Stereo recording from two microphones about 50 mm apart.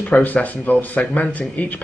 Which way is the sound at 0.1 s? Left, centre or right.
Left.